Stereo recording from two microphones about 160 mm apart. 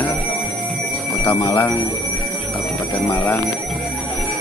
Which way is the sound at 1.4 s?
15° left (ahead or behind).